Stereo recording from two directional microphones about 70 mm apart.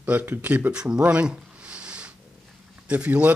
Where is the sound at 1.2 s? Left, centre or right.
Centre.